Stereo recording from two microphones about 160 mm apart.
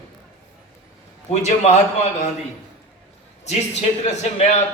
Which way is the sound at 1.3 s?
45° left (ahead or behind).